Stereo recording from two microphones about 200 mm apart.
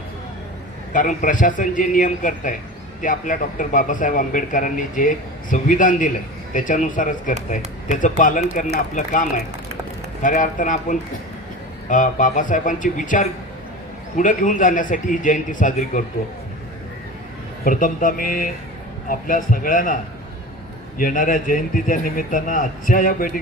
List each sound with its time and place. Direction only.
0.9 s a man's voice: 40° left (ahead or behind)
10.2 s a man's voice: 40° left (ahead or behind)
17.6 s a man's voice: 45° left (ahead or behind)
21.0 s a man's voice: 45° left (ahead or behind)